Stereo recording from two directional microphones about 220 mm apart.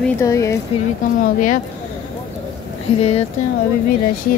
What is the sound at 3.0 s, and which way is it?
Speech, 30° left (ahead or behind).